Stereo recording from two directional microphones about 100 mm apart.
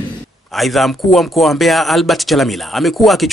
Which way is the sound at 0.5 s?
Centre (ahead or behind).